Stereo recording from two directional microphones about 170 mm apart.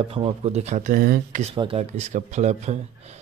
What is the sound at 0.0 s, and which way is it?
A man's voice, 35° right (ahead or behind).